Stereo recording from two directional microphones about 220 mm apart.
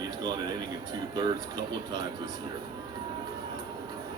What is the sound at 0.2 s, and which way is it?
Speech, 20° right (ahead or behind).